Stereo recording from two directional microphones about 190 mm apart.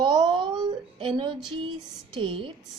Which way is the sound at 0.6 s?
25° right (ahead or behind).